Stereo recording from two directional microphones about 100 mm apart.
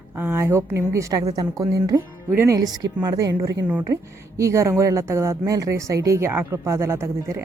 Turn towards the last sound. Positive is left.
turn(degrees=-25)  # may be behind; listen again after turning